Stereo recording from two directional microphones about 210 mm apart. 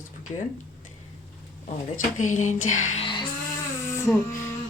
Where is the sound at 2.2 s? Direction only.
35° left (ahead or behind).